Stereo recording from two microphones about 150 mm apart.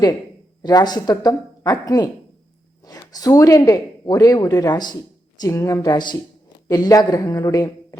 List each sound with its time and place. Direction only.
0.6 s speech: 25° left (ahead or behind)